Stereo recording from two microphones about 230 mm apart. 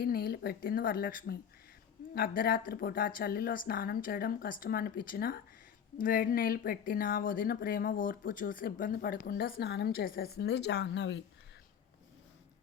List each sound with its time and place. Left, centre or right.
0.0 s speech: left